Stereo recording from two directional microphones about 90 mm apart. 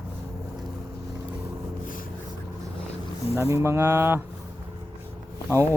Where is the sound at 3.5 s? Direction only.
30° right (ahead or behind).